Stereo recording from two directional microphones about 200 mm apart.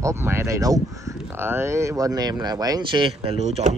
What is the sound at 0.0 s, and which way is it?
Speech, 15° right (ahead or behind).